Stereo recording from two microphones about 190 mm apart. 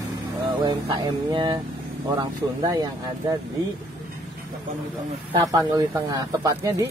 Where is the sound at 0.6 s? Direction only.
25° right (ahead or behind).